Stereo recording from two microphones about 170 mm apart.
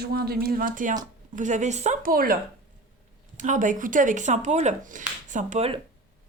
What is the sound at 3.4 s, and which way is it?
Speech, 50° right (ahead or behind).